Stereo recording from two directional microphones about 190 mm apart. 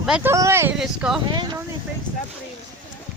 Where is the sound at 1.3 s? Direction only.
25° right (ahead or behind).